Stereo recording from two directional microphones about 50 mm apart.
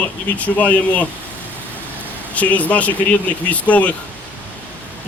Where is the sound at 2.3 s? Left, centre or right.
Left.